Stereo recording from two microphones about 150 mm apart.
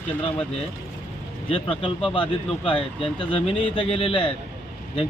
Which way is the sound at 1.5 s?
35° left (ahead or behind).